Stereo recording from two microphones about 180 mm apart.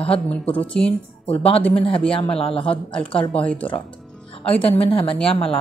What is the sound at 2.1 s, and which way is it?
Speech, 30° left (ahead or behind).